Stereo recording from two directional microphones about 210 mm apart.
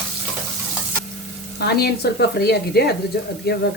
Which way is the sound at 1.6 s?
50° left (ahead or behind).